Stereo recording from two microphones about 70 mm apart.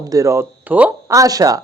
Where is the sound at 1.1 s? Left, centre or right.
Right.